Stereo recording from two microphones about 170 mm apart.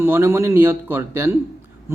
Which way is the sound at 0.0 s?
15° right (ahead or behind).